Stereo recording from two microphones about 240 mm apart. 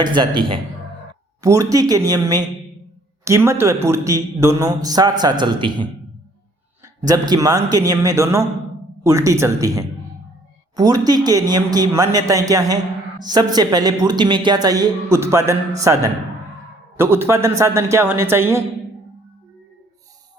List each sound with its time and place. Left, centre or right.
0.0 s a man's voice: centre